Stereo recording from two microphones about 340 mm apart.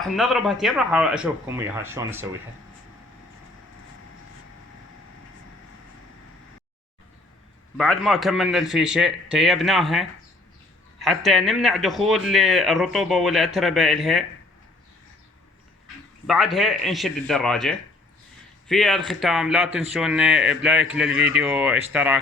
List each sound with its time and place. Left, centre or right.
0.0 s speech: centre
7.8 s speech: centre
16.2 s speech: centre